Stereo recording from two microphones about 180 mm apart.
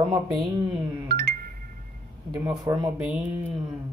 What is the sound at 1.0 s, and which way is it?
Music, 65° right (ahead or behind).